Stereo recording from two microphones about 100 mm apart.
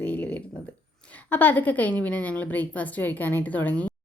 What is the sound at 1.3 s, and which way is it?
A woman's voice, 20° left (ahead or behind).